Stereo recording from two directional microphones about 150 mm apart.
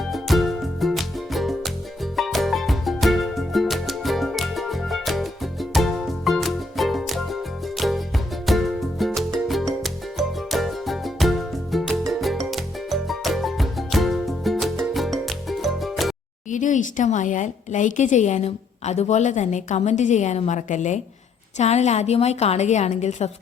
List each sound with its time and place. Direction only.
0.0 s music: centre (ahead or behind)
16.5 s a woman's voice: 55° left (ahead or behind)